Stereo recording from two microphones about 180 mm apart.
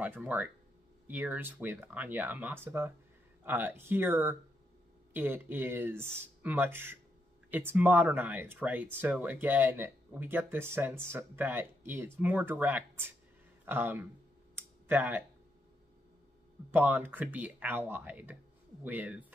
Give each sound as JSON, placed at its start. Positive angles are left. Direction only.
{"t": 0.0, "sound": "speech", "side_deg": -10}
{"t": 14.5, "sound": "clicking", "side_deg": -10}
{"t": 16.7, "sound": "speech", "side_deg": -10}